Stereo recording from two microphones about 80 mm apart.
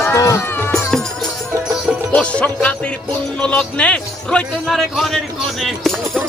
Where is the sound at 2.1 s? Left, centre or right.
Centre.